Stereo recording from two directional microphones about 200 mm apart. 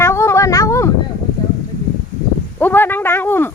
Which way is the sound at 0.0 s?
15° left (ahead or behind).